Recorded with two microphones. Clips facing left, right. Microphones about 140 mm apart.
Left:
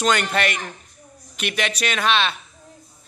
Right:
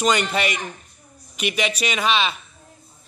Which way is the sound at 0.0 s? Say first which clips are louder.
Even; 5° right (ahead or behind).